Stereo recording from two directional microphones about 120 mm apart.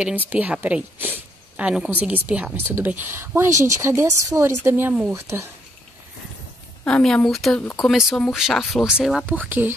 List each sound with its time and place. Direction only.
0.3 s a woman's voice: 15° right (ahead or behind)
6.8 s speech: 5° left (ahead or behind)
9.2 s a woman's voice: 15° right (ahead or behind)